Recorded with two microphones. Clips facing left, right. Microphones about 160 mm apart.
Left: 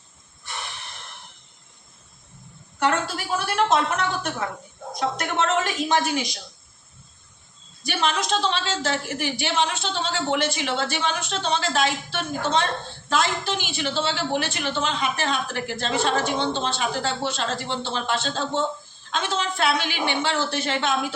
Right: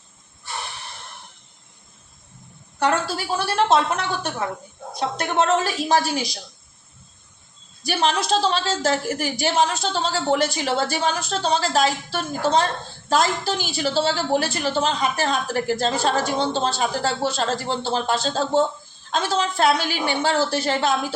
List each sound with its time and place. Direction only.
2.7 s a woman's voice: 35° right (ahead or behind)
7.9 s a woman's voice: 35° right (ahead or behind)